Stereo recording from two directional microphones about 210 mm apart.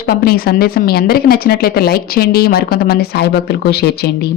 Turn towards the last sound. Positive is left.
turn(degrees=50)  # may be behind; listen again after turning